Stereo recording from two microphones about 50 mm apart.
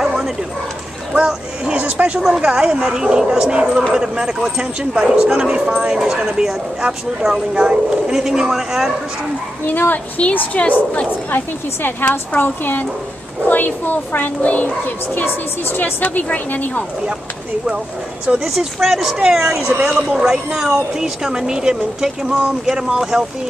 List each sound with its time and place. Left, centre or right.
0.0 s bow-wow: centre
1.1 s a sound: centre
1.8 s speech: right
2.1 s speech: centre
9.7 s a woman's voice: left
18.4 s speech: centre